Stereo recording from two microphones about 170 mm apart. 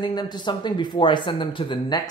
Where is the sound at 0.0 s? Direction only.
25° left (ahead or behind).